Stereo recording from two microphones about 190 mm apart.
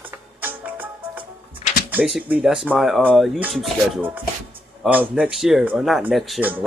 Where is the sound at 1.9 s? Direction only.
5° right (ahead or behind).